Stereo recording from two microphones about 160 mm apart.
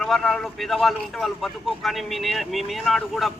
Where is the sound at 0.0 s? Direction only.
Centre (ahead or behind).